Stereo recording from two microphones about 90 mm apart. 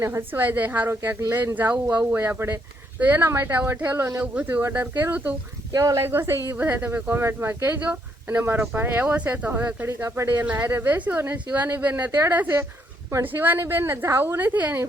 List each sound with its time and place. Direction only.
0.0 s speech: 25° right (ahead or behind)
4.4 s speech: 20° right (ahead or behind)
5.7 s speech: 40° right (ahead or behind)
6.1 s speech: 25° right (ahead or behind)
10.0 s speech: 30° right (ahead or behind)
10.3 s speech: 20° right (ahead or behind)